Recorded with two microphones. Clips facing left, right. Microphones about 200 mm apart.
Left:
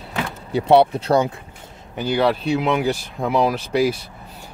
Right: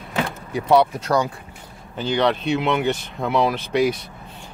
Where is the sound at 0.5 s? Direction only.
30° left (ahead or behind).